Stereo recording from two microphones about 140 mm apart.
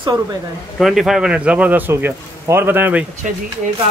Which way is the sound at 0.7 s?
Centre (ahead or behind).